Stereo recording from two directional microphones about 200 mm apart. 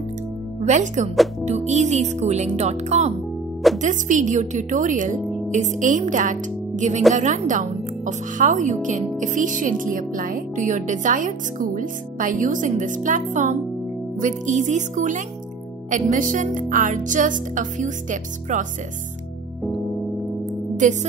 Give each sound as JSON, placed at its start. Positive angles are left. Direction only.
{"t": 0.6, "sound": "speech", "side_deg": -35}
{"t": 20.4, "sound": "music", "side_deg": -35}